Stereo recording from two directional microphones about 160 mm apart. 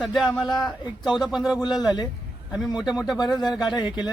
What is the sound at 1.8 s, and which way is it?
Speech, 25° left (ahead or behind).